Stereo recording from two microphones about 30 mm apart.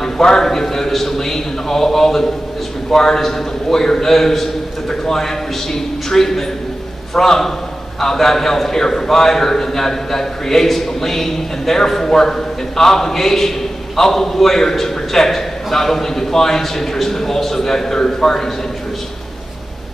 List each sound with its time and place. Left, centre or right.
0.0 s a man's voice: centre